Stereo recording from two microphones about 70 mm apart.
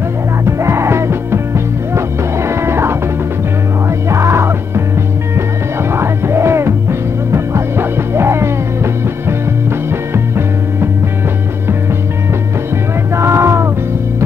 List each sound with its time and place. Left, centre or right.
0.5 s music: right
4.1 s music: right
5.9 s music: right
13.1 s a sound: right